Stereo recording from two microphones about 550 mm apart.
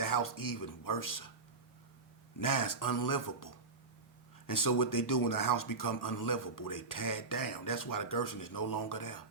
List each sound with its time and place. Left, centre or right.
0.0 s speech: left
2.4 s speech: left